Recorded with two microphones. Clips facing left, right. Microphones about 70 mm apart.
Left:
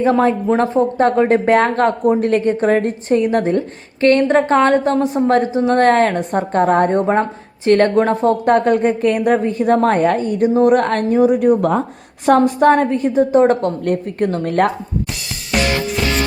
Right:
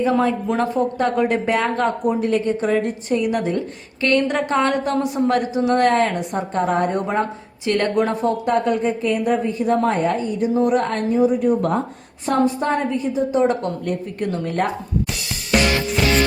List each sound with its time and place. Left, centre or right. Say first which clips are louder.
0.0 s speech: left 4 dB; left
5.9 s a woman's voice: left 5 dB; left
6.9 s a woman's voice: left 6 dB; left
10.8 s a woman's voice: left 4 dB; left
12.2 s a woman's voice: left 7 dB; left